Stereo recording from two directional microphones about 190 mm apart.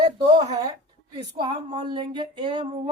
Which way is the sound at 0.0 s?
20° right (ahead or behind).